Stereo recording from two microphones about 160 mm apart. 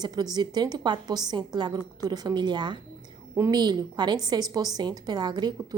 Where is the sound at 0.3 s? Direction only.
25° right (ahead or behind).